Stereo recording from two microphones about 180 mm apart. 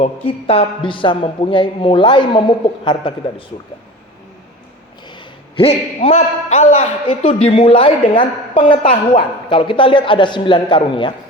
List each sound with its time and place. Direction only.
0.0 s a man's voice: 35° left (ahead or behind)
5.0 s a man's voice: 30° left (ahead or behind)